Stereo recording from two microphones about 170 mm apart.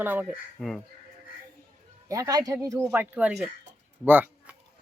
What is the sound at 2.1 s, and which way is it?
Speech, 20° right (ahead or behind).